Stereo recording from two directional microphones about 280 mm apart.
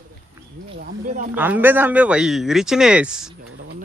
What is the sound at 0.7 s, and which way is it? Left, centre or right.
Speech, right.